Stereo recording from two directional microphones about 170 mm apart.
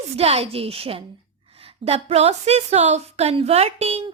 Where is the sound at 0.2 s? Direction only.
35° right (ahead or behind).